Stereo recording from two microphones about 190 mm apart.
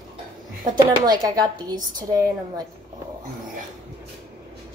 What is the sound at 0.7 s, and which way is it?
Speech, 20° right (ahead or behind).